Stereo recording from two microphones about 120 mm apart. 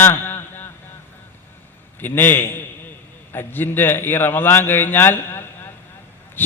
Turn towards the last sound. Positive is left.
turn(degrees=20)  # may be behind; listen again after turning